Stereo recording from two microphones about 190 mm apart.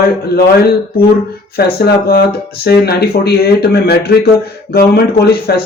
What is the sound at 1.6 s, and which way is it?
Speech, 55° left (ahead or behind).